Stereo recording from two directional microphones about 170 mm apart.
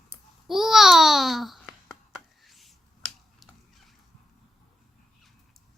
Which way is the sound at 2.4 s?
Centre (ahead or behind).